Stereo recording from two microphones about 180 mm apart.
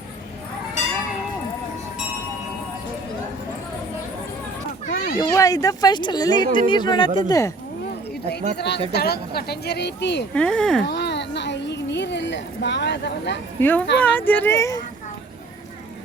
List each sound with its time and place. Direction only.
4.9 s a sound: 55° left (ahead or behind)
5.2 s speech: 20° left (ahead or behind)
8.5 s speech: 70° left (ahead or behind)
10.3 s speech: 5° left (ahead or behind)
10.8 s a sound: 70° left (ahead or behind)
13.6 s speech: 10° left (ahead or behind)